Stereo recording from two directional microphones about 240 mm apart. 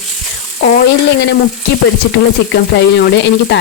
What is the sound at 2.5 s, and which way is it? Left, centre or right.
A woman's voice, left.